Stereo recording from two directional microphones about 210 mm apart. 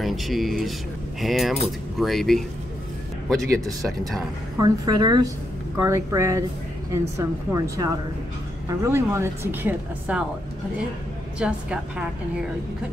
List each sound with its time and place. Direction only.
0.0 s speech: centre (ahead or behind)
4.6 s a woman's voice: 20° right (ahead or behind)
11.3 s speech: 5° right (ahead or behind)